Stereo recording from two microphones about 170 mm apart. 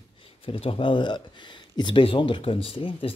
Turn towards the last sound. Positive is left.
turn(degrees=35)  # may be behind; listen again after turning